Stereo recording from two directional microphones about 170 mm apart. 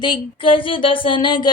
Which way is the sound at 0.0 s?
30° left (ahead or behind).